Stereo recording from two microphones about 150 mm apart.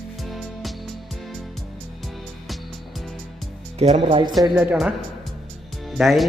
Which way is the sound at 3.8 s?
45° right (ahead or behind).